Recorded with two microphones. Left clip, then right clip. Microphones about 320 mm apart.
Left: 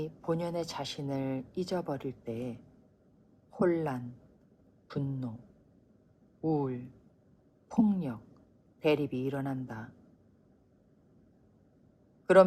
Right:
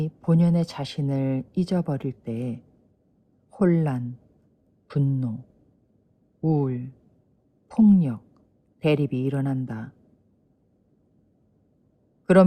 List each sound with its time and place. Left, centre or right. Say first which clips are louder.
0.0 s speech: right 7 dB; right
6.4 s speech: right 6 dB; right
12.2 s speech: right 3 dB; right